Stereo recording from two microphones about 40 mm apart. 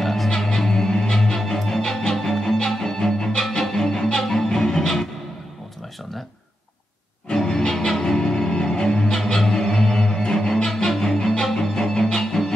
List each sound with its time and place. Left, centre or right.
0.0 s music: centre
7.3 s music: centre